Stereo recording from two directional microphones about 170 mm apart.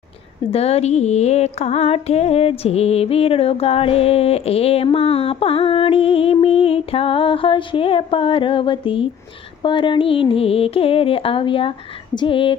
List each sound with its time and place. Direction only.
0.5 s music: 35° left (ahead or behind)